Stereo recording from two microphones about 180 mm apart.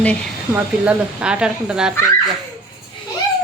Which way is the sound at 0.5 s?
5° right (ahead or behind).